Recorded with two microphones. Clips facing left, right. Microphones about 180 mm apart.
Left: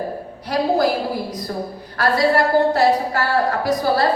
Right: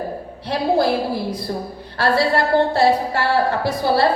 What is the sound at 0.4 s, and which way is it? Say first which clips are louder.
Speech: even; 30° right (ahead or behind).